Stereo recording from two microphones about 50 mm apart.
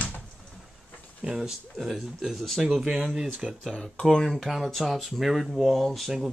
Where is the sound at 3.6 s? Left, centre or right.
Centre.